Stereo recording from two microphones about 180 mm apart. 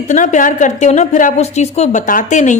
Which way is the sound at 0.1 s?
45° left (ahead or behind).